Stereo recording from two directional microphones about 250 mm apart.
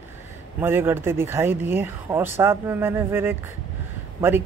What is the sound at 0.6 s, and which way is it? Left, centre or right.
Speech, centre.